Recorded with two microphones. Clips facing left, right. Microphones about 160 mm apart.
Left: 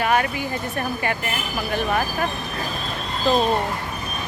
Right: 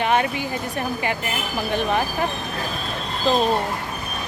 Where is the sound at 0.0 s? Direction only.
20° right (ahead or behind).